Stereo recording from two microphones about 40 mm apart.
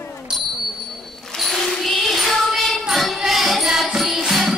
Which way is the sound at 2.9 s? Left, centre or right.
Centre.